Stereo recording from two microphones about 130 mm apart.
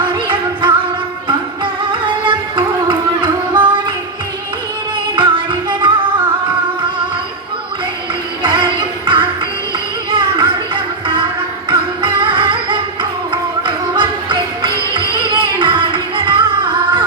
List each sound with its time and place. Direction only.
0.1 s music: 40° right (ahead or behind)
5.1 s music: 40° right (ahead or behind)
8.4 s music: 40° right (ahead or behind)